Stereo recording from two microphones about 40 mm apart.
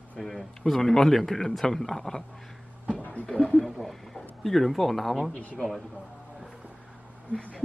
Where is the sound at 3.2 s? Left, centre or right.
Left.